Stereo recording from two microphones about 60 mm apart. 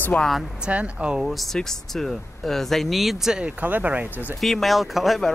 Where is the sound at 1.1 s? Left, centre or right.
Centre.